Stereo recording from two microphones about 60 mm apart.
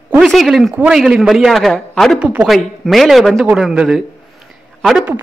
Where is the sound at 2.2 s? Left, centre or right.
Right.